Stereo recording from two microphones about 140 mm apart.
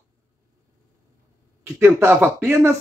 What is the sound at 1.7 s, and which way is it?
Speech, 20° right (ahead or behind).